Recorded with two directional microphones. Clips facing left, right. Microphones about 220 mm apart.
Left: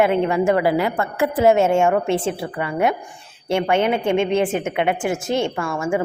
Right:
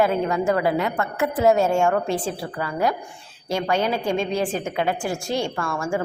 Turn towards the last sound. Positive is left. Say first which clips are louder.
# left 3 dB
turn(degrees=20)  # may be behind; listen again after turning